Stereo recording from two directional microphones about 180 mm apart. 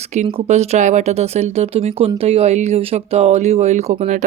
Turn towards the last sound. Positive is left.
turn(degrees=-40)  # may be behind; listen again after turning